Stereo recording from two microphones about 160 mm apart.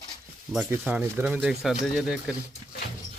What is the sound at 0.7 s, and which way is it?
Speech, 10° right (ahead or behind).